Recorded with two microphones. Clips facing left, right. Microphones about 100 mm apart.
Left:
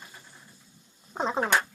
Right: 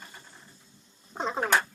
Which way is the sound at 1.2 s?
35° left (ahead or behind).